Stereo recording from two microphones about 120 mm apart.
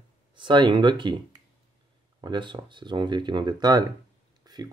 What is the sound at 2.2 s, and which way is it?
Speech, 40° right (ahead or behind).